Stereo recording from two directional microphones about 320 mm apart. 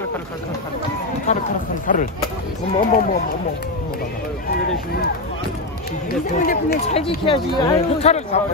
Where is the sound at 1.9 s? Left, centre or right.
Left.